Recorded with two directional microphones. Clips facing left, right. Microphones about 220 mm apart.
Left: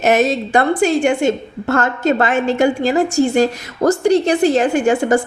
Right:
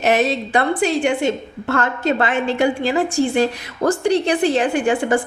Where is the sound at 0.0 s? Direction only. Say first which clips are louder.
Left 3 dB; 45° left (ahead or behind).